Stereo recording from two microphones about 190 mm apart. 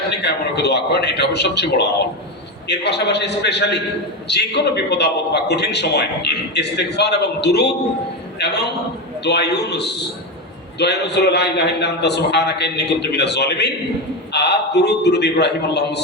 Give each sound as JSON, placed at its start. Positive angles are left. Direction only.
{"t": 0.2, "sound": "a man's voice", "side_deg": 60}